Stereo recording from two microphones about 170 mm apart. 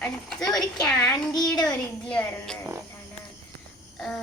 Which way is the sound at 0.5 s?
5° left (ahead or behind).